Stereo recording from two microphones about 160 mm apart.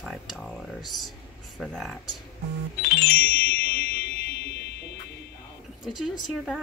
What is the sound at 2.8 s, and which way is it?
Music, 75° left (ahead or behind).